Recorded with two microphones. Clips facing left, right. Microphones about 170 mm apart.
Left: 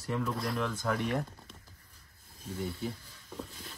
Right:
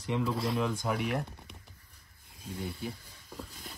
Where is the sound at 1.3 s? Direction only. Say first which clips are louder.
Right 2 dB; 15° right (ahead or behind).